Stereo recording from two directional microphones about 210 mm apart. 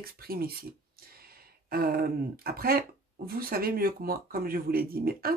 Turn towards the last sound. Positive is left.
turn(degrees=-45)  # may be behind; listen again after turning